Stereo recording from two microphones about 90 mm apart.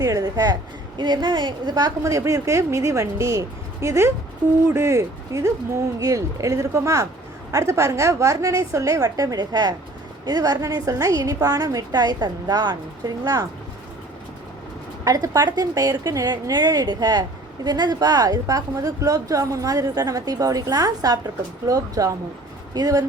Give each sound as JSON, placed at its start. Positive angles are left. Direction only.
{"t": 0.0, "sound": "a woman's voice", "side_deg": -40}
{"t": 15.0, "sound": "a woman's voice", "side_deg": -40}